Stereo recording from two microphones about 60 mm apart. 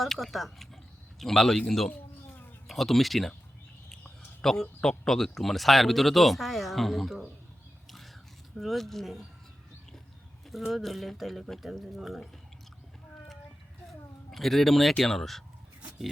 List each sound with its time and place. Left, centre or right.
0.0 s speech: centre
4.4 s speech: centre
7.9 s a sound: centre
8.5 s speech: centre
10.5 s speech: centre
14.3 s speech: centre